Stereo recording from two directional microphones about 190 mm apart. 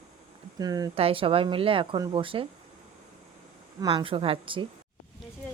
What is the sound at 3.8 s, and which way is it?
Speech, 25° right (ahead or behind).